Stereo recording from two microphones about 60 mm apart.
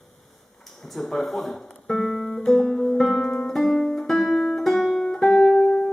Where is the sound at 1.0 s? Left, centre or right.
Centre.